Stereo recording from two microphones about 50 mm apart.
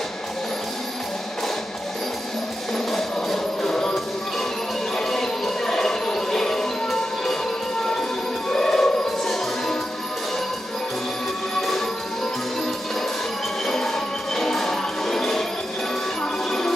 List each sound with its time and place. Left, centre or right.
2.7 s music: centre
4.9 s music: centre
8.4 s music: centre
13.7 s music: centre
16.5 s music: centre